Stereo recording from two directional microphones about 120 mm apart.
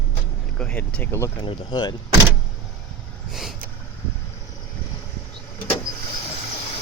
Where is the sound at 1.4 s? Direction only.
35° left (ahead or behind).